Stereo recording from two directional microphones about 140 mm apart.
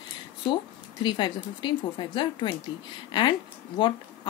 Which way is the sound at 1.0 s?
35° left (ahead or behind).